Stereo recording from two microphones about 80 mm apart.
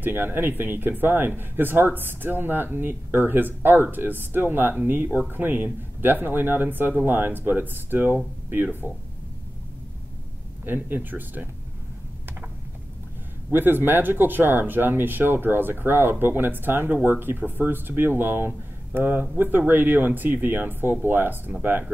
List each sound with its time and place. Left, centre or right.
0.0 s speech: right
10.6 s speech: right
13.5 s speech: right